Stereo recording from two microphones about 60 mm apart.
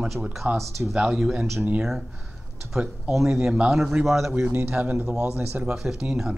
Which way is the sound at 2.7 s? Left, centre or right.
Centre.